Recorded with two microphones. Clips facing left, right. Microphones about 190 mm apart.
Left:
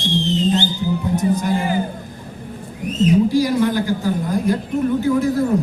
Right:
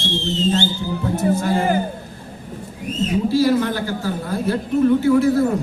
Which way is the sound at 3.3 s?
15° left (ahead or behind).